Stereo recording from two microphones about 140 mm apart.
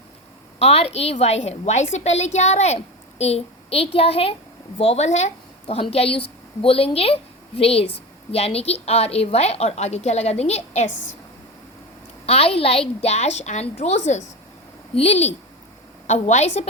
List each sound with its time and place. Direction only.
0.6 s a woman's voice: 50° left (ahead or behind)
12.2 s a woman's voice: 45° left (ahead or behind)